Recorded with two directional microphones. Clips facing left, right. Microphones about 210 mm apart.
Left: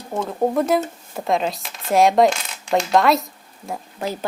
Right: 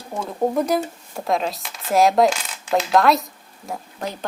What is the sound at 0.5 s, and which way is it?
Speech, centre (ahead or behind).